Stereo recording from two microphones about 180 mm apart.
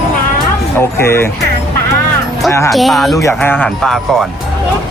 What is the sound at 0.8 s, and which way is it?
Speech, 15° left (ahead or behind).